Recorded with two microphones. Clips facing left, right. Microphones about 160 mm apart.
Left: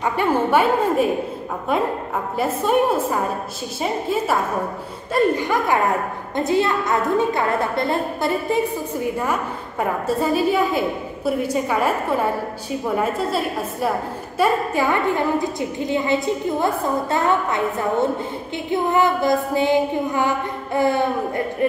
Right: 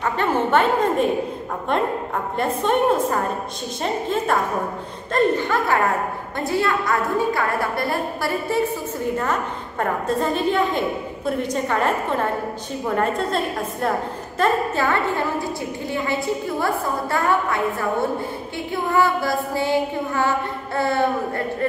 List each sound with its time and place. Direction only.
0.0 s a woman's voice: 10° left (ahead or behind)
2.3 s a woman's voice: 5° left (ahead or behind)
9.2 s a woman's voice: 10° left (ahead or behind)